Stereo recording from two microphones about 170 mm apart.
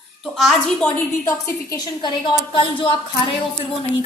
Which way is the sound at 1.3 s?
15° left (ahead or behind).